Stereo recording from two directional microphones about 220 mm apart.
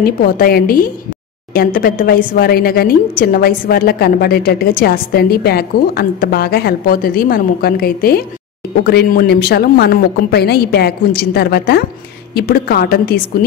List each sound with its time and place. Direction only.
0.0 s a woman's voice: 45° left (ahead or behind)